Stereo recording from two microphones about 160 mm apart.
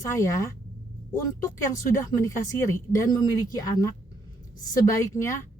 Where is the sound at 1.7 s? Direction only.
20° left (ahead or behind).